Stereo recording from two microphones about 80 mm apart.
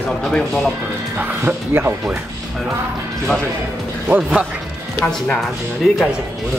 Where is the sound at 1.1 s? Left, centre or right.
Right.